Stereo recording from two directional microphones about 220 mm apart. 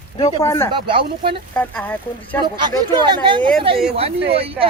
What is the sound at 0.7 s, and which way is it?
Speech, 25° right (ahead or behind).